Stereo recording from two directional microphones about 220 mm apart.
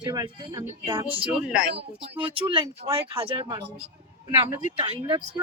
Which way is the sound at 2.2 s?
25° right (ahead or behind).